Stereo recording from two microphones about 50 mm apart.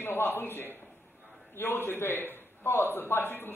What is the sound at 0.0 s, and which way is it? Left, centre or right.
A man's voice, left.